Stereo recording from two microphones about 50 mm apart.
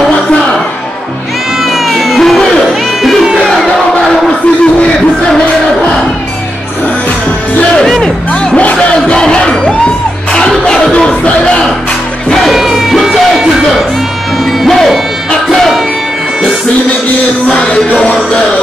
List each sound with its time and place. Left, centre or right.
1.9 s cat: centre
8.5 s music: left
12.4 s music: centre
15.5 s music: centre
17.5 s music: centre